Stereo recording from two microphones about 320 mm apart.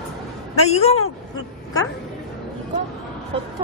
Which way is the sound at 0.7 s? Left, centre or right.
Centre.